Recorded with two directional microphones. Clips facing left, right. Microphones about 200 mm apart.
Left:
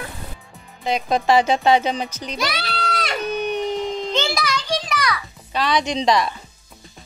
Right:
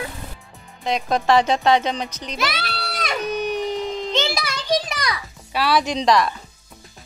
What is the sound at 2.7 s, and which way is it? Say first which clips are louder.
Music: left 3 dB; 10° right (ahead or behind).